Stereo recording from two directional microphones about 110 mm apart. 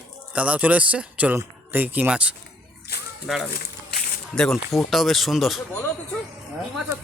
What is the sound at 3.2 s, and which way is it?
Speech, centre (ahead or behind).